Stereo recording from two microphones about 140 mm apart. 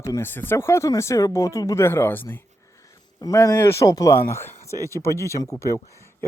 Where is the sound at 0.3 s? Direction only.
15° left (ahead or behind).